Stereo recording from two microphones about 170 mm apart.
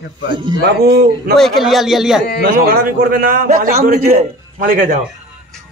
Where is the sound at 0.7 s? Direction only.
75° right (ahead or behind).